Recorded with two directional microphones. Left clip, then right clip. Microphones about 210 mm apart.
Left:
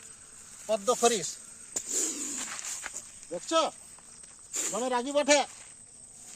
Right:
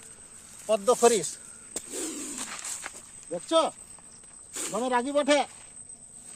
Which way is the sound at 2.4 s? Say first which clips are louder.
Right 1 dB; 30° right (ahead or behind).